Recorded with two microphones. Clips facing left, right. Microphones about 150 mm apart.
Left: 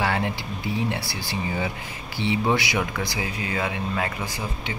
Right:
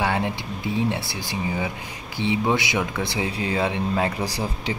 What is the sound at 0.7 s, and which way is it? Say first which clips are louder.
Speech: right 4 dB; 20° right (ahead or behind).